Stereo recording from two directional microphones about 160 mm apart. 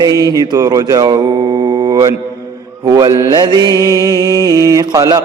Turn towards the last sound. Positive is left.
turn(degrees=-20)  # may be behind; listen again after turning